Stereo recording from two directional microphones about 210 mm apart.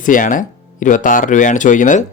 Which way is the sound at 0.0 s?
40° left (ahead or behind).